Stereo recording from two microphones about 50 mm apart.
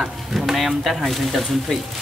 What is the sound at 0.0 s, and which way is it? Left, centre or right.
Speech, centre.